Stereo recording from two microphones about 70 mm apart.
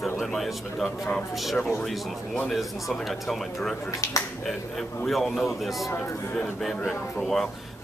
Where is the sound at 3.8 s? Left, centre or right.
Left.